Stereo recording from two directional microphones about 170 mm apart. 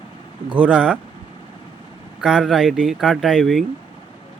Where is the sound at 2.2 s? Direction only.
Centre (ahead or behind).